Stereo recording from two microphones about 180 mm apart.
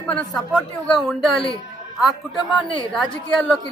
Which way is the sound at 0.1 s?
5° left (ahead or behind).